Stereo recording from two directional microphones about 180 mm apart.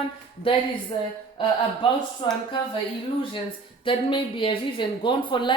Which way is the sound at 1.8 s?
30° left (ahead or behind).